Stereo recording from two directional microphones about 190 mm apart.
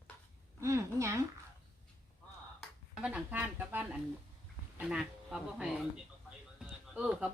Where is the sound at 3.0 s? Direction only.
5° right (ahead or behind).